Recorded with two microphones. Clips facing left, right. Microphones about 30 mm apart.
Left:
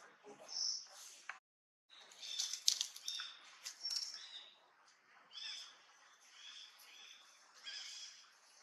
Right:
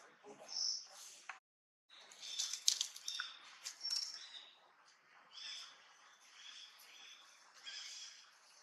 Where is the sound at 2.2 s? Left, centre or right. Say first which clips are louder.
Even; centre.